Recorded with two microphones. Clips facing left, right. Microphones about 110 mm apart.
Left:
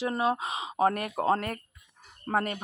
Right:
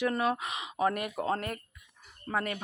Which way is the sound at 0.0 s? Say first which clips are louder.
Left 1 dB; 25° left (ahead or behind).